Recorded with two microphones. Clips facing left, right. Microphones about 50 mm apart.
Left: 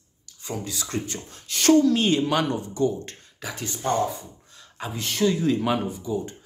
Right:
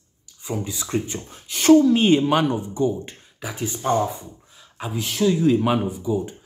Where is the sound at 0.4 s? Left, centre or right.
Centre.